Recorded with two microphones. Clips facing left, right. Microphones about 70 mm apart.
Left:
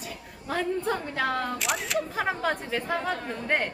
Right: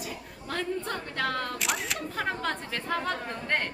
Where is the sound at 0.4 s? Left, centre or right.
Centre.